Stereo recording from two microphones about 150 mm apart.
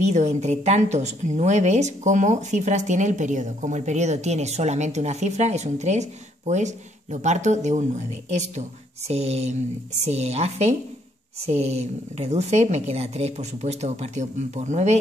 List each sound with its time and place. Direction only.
0.0 s speech: 50° right (ahead or behind)